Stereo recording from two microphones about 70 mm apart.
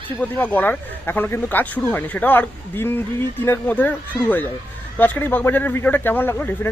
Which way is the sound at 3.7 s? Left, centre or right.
Left.